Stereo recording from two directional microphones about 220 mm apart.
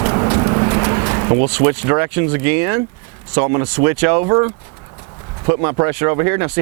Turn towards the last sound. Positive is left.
turn(degrees=-15)  # may be behind; listen again after turning